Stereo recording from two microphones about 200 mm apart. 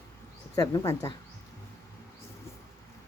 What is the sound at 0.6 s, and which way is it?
Speech, 15° left (ahead or behind).